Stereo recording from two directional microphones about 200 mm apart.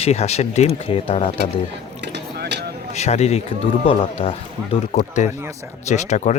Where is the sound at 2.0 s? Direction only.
55° right (ahead or behind).